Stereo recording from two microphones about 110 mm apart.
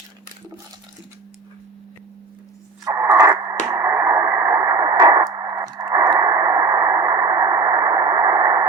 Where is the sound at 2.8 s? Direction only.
25° right (ahead or behind).